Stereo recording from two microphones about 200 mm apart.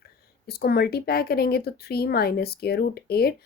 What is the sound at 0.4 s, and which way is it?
Speech, 50° left (ahead or behind).